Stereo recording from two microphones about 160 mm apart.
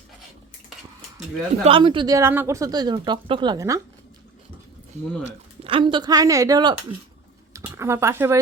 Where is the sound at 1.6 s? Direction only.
35° right (ahead or behind).